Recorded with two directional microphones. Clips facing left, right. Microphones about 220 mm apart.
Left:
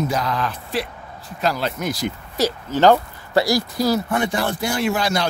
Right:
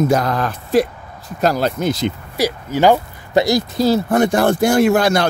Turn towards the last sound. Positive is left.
turn(degrees=-50)  # may be behind; listen again after turning